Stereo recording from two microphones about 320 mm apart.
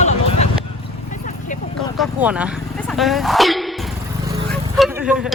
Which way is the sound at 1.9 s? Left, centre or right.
Centre.